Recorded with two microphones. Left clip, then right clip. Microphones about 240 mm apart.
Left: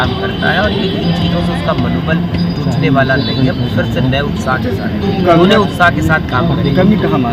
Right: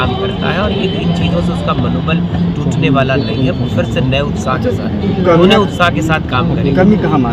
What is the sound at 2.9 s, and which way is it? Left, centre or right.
Speech, centre.